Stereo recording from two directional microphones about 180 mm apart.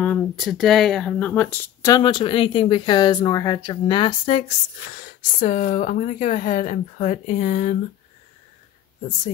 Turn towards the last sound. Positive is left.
turn(degrees=40)  # may be behind; listen again after turning